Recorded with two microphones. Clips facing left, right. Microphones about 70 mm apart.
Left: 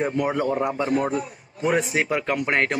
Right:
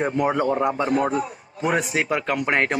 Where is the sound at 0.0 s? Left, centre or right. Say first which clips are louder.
Right 2 dB; right.